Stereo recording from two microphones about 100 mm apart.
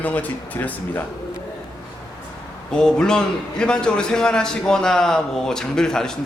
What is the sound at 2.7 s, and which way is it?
A man's voice, 5° left (ahead or behind).